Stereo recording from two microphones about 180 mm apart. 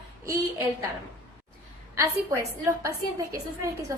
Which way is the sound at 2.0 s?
15° right (ahead or behind).